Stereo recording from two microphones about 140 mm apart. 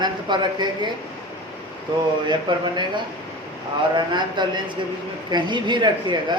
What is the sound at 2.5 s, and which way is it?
Speech, 35° right (ahead or behind).